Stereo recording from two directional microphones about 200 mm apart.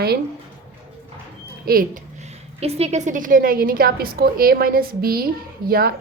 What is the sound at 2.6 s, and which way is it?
A woman's voice, 35° right (ahead or behind).